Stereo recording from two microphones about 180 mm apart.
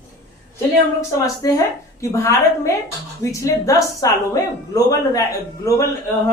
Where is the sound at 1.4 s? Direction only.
20° left (ahead or behind).